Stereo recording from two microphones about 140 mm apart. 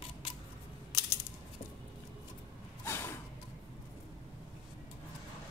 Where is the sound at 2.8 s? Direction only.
15° left (ahead or behind).